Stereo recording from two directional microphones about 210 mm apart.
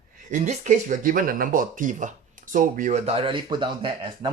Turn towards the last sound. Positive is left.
turn(degrees=-25)  # may be behind; listen again after turning